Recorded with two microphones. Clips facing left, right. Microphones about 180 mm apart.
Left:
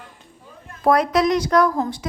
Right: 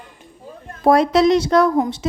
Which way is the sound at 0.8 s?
25° right (ahead or behind).